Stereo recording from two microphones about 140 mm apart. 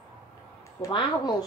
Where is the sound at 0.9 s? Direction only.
35° left (ahead or behind).